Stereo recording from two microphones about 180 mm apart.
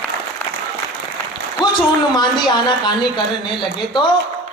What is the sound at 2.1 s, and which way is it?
Speech, 25° left (ahead or behind).